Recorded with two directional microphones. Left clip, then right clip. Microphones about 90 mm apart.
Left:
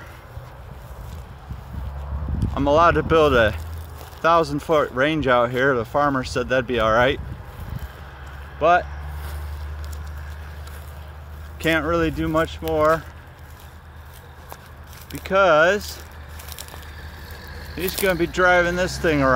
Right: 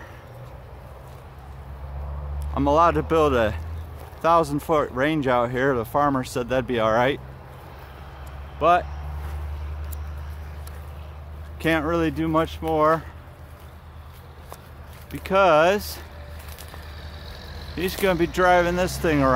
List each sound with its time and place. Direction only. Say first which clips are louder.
2.5 s speech: left 2 dB; 5° right (ahead or behind)
8.5 s speech: left 2 dB; 15° right (ahead or behind)
11.8 s speech: left 2 dB; 20° right (ahead or behind)
15.2 s speech: left 1 dB; 35° right (ahead or behind)
17.7 s speech: left 1 dB; 40° right (ahead or behind)
18.1 s speech: left 1 dB; 25° right (ahead or behind)
19.0 s speech: left 2 dB; 10° right (ahead or behind)